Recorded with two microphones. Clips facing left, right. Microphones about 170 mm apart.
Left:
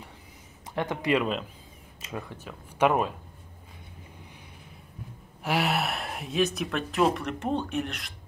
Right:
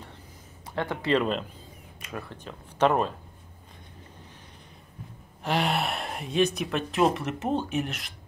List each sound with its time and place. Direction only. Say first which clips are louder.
0.7 s speech: even; 15° left (ahead or behind)
1.2 s speech: right 2 dB; centre (ahead or behind)
5.4 s speech: even; 5° left (ahead or behind)